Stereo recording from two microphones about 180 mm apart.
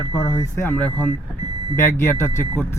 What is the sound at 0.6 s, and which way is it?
Speech, 5° left (ahead or behind).